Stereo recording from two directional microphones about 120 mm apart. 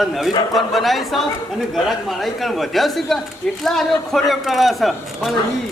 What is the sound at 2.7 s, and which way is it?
A man's voice, centre (ahead or behind).